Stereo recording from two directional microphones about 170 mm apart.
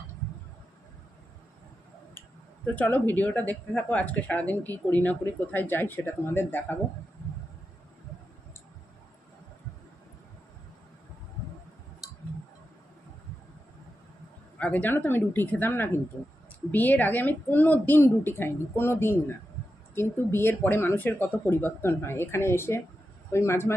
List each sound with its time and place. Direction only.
2.7 s speech: 10° left (ahead or behind)
14.6 s speech: 10° left (ahead or behind)